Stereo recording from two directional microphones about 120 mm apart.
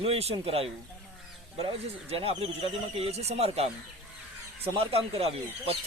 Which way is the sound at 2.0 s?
55° right (ahead or behind).